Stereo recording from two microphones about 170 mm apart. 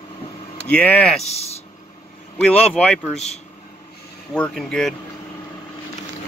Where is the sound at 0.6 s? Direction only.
10° left (ahead or behind).